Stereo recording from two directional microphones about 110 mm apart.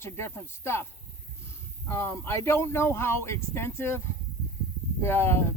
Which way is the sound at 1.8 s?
25° left (ahead or behind).